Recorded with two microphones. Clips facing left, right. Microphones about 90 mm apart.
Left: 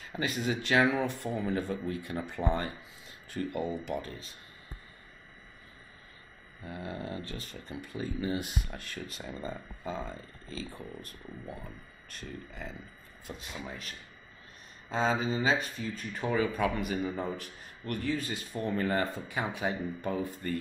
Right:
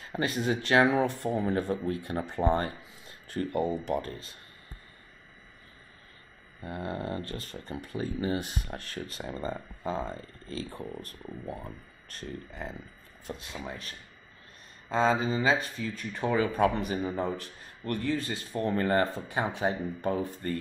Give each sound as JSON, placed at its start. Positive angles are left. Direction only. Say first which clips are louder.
{"t": 0.0, "sound": "speech", "louder": "right 3 dB", "side_deg": -40}
{"t": 6.6, "sound": "speech", "louder": "right 4 dB", "side_deg": -50}
{"t": 10.8, "sound": "speech", "louder": "right 4 dB", "side_deg": -35}
{"t": 14.9, "sound": "speech", "louder": "right 3 dB", "side_deg": -40}
{"t": 19.0, "sound": "speech", "louder": "right 3 dB", "side_deg": -30}